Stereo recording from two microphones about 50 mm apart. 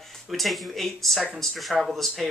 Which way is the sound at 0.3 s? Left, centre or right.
Centre.